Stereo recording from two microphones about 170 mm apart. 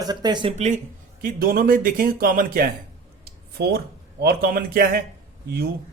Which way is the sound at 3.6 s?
85° right.